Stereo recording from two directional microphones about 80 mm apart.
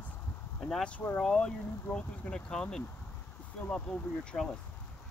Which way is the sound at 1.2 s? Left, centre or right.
Centre.